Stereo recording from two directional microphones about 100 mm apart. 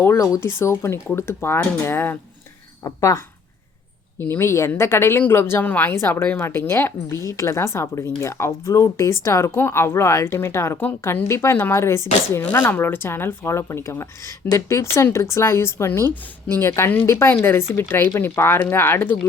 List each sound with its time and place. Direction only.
0.0 s speech: 30° left (ahead or behind)
2.8 s speech: 35° left (ahead or behind)
4.2 s speech: 25° left (ahead or behind)